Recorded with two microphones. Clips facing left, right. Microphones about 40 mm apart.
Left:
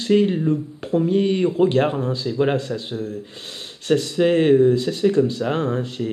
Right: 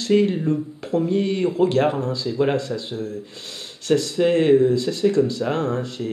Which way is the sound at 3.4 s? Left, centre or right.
Centre.